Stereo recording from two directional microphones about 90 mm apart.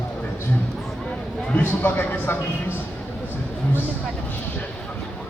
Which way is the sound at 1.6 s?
20° left (ahead or behind).